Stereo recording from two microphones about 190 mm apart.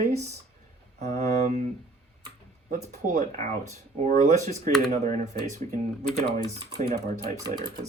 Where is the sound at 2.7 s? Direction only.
40° right (ahead or behind).